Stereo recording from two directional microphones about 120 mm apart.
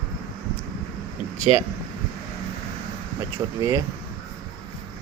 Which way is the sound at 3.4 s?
20° right (ahead or behind).